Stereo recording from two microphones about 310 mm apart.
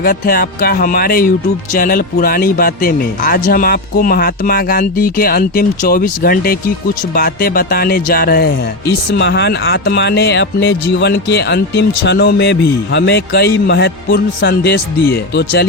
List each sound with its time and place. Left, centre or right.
0.0 s a man's voice: left